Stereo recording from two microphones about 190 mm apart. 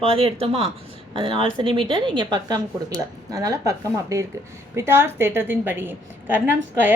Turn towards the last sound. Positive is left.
turn(degrees=-10)  # may be behind; listen again after turning